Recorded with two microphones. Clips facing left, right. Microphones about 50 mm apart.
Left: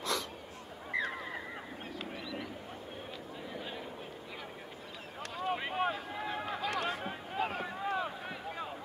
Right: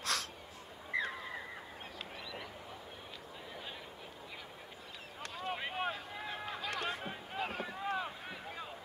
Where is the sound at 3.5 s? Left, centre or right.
Centre.